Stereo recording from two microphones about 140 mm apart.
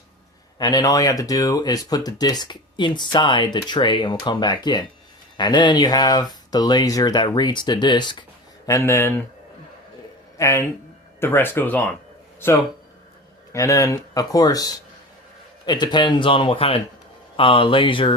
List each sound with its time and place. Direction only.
0.6 s speech: 25° left (ahead or behind)
8.6 s speech: 20° left (ahead or behind)
10.3 s speech: 20° left (ahead or behind)
13.5 s speech: 20° left (ahead or behind)